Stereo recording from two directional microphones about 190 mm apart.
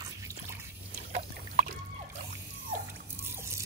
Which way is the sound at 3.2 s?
15° right (ahead or behind).